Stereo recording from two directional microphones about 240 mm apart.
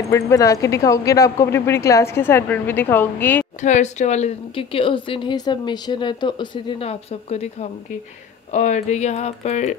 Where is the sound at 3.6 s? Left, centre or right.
Left.